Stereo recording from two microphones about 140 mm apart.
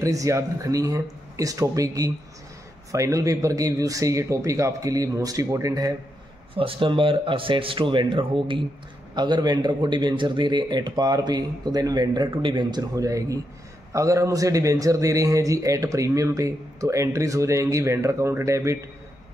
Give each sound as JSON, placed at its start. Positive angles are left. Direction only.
{"t": 0.0, "sound": "a man's voice", "side_deg": -25}
{"t": 6.5, "sound": "a man's voice", "side_deg": -40}